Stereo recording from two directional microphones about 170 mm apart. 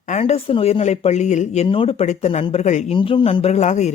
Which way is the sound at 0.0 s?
45° left (ahead or behind).